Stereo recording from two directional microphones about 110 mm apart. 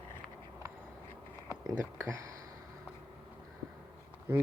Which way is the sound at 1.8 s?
25° right (ahead or behind).